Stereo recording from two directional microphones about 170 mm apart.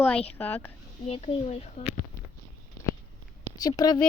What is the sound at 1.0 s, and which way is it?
Speech, 35° left (ahead or behind).